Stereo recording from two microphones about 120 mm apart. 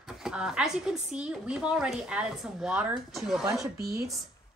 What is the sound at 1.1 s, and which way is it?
Speech, 5° right (ahead or behind).